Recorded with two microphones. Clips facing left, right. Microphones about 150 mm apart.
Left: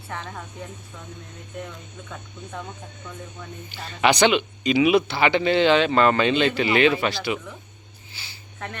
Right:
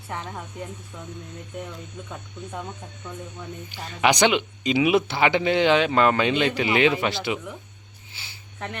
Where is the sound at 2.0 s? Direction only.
15° right (ahead or behind).